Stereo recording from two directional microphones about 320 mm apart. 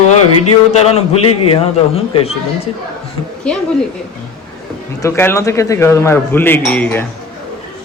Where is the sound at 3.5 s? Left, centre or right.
Centre.